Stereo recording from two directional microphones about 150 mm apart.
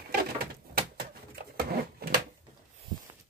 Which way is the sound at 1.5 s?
90° right.